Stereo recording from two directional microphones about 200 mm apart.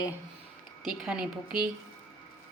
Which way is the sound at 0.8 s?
Centre (ahead or behind).